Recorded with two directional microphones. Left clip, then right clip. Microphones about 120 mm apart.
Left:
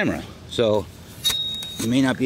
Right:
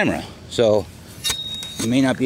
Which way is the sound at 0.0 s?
20° right (ahead or behind).